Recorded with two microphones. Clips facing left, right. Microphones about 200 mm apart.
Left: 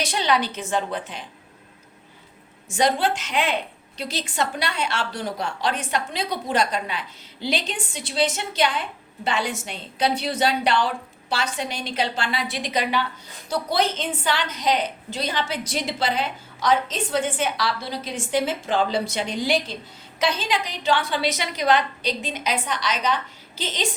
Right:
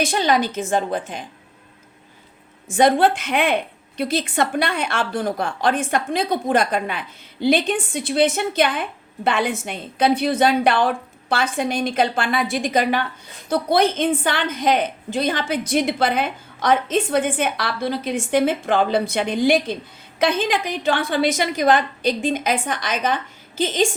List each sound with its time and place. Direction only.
0.0 s a woman's voice: 50° right (ahead or behind)
2.6 s a woman's voice: 55° right (ahead or behind)